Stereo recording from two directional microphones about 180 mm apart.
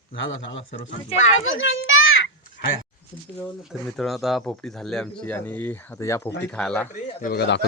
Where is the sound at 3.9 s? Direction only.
Centre (ahead or behind); by 6.3 s 15° left (ahead or behind).